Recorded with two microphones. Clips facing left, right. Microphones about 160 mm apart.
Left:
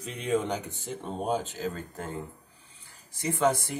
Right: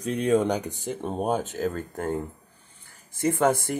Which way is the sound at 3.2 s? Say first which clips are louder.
Right 4 dB; 50° right (ahead or behind).